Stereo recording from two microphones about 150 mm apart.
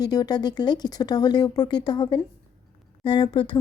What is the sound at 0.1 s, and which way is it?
Speech, 25° left (ahead or behind).